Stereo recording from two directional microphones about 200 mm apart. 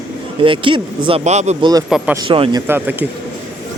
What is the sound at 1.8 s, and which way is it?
Speech, centre (ahead or behind).